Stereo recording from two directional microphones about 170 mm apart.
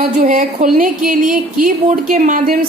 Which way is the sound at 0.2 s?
55° right (ahead or behind).